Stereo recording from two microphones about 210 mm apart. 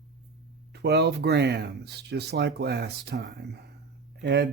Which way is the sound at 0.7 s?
55° right (ahead or behind).